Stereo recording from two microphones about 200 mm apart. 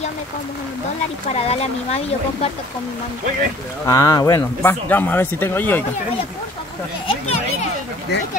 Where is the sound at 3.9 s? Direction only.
15° left (ahead or behind).